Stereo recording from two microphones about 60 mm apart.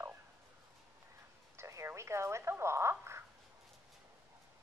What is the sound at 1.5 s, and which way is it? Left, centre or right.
Speech, right.